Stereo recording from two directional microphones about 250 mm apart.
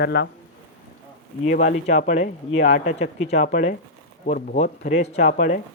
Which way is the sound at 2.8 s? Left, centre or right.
Left.